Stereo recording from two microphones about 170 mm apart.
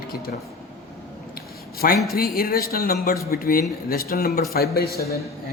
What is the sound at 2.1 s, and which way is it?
Speech, 65° left (ahead or behind).